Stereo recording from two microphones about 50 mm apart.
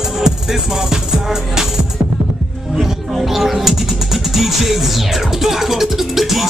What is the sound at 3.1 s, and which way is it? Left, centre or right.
Speech, centre.